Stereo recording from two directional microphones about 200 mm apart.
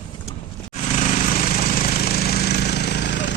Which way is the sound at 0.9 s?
35° left (ahead or behind).